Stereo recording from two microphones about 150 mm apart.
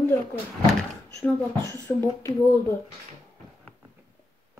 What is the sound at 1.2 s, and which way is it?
Speech, 15° left (ahead or behind).